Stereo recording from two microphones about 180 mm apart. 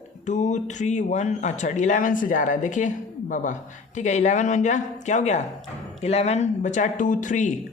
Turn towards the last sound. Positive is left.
turn(degrees=45)  # may be behind; listen again after turning